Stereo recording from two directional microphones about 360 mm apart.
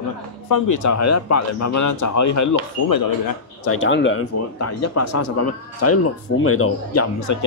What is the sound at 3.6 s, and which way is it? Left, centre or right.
Speech, left.